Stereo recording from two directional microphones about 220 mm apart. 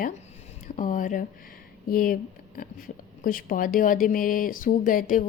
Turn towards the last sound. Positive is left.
turn(degrees=40)  # may be behind; listen again after turning